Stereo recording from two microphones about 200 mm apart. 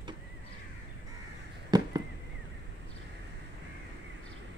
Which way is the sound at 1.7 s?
20° right (ahead or behind).